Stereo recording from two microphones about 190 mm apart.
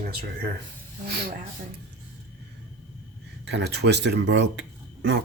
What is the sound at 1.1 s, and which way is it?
Speech, 55° right (ahead or behind).